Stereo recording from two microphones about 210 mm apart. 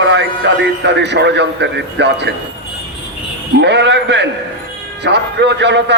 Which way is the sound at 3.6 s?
55° right (ahead or behind).